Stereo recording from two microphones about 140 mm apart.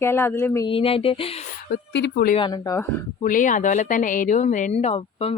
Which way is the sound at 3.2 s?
70° left (ahead or behind).